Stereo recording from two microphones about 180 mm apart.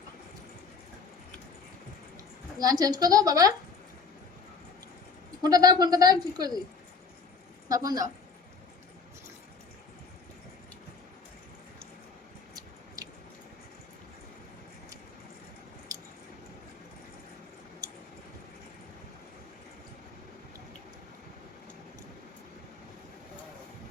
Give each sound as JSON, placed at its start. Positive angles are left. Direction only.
{"t": 2.6, "sound": "speech", "side_deg": -20}
{"t": 5.4, "sound": "speech", "side_deg": -20}
{"t": 7.7, "sound": "speech", "side_deg": -20}
{"t": 17.8, "sound": "a sound", "side_deg": -20}